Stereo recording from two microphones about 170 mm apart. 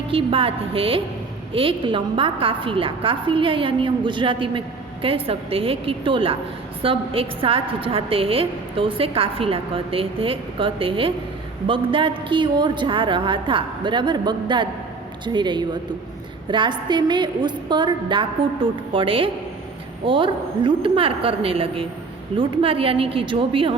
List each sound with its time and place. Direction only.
0.1 s a woman's voice: 30° right (ahead or behind)